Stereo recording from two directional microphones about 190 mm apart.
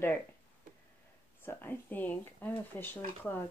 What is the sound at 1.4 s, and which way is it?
Speech, 10° left (ahead or behind).